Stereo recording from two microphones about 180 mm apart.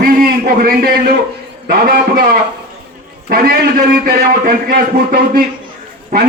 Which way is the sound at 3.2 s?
55° right (ahead or behind).